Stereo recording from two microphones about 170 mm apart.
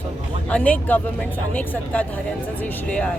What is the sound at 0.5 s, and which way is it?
Speech, 10° left (ahead or behind).